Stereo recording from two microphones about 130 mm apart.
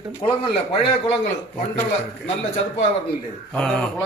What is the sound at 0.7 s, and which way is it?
Speech, 55° left (ahead or behind).